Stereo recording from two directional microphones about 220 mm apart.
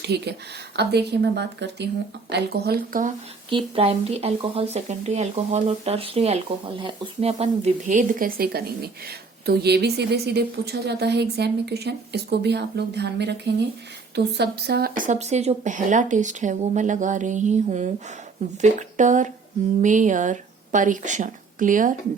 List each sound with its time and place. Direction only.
0.0 s speech: 50° right (ahead or behind)
3.5 s speech: 25° right (ahead or behind); by 13.3 s 50° right (ahead or behind)
14.3 s speech: 45° right (ahead or behind)